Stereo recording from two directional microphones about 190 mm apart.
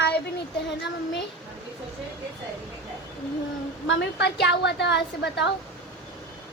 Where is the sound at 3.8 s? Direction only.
70° left (ahead or behind).